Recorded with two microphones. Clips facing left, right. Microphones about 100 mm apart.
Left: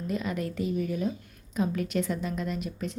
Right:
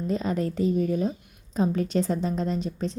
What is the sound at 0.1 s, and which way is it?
A woman's voice, 35° right (ahead or behind).